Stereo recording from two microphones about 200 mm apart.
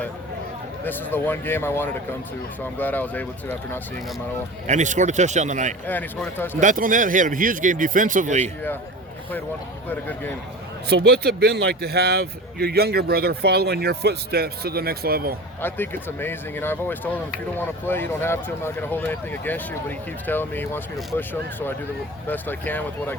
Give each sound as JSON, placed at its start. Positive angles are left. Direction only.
{"t": 0.9, "sound": "speech", "side_deg": 10}
{"t": 4.6, "sound": "speech", "side_deg": -35}
{"t": 5.8, "sound": "speech", "side_deg": 10}
{"t": 6.6, "sound": "speech", "side_deg": -40}
{"t": 9.9, "sound": "speech", "side_deg": 10}
{"t": 10.8, "sound": "speech", "side_deg": -55}
{"t": 15.6, "sound": "speech", "side_deg": 10}